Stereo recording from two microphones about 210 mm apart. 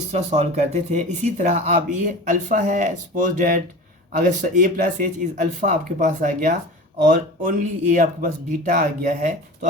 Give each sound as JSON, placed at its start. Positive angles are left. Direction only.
{"t": 0.1, "sound": "speech", "side_deg": -30}